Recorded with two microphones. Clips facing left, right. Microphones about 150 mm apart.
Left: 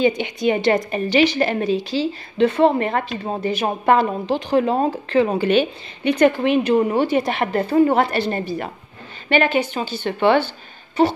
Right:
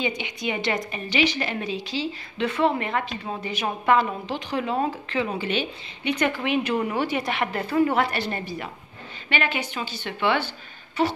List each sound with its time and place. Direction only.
0.0 s a woman's voice: 40° left (ahead or behind)